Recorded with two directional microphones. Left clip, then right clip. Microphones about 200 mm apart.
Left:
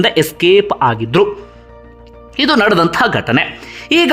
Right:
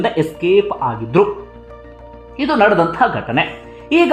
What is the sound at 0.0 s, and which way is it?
Speech, 20° left (ahead or behind).